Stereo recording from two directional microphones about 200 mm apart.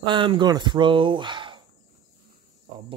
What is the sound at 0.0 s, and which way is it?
Speech, 25° right (ahead or behind).